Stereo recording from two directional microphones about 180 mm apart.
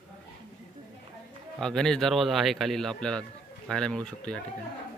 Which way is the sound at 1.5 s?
5° left (ahead or behind).